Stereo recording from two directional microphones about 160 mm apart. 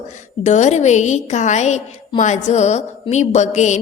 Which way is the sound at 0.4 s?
45° left (ahead or behind).